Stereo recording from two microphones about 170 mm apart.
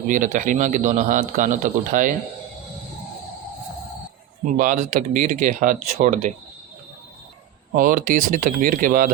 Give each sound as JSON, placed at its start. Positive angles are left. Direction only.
{"t": 0.1, "sound": "speech", "side_deg": -50}
{"t": 4.5, "sound": "speech", "side_deg": -55}
{"t": 7.8, "sound": "speech", "side_deg": -55}